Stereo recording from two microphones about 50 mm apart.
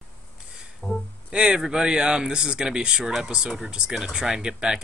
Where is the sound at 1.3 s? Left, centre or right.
Right.